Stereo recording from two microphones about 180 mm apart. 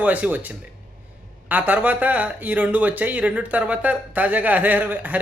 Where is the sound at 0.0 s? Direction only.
10° right (ahead or behind).